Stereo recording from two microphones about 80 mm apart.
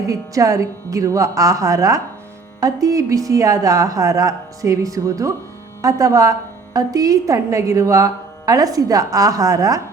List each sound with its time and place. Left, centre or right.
0.1 s a woman's voice: right